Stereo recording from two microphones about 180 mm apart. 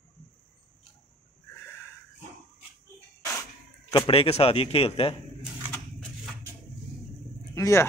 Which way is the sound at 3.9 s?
30° left (ahead or behind).